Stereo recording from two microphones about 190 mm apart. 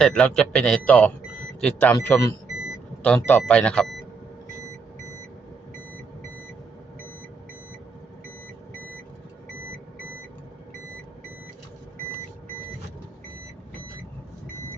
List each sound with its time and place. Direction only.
0.0 s a man's voice: 5° left (ahead or behind)